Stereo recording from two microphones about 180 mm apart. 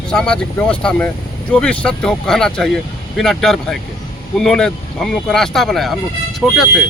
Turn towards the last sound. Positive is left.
turn(degrees=0)  # may be behind; listen again after turning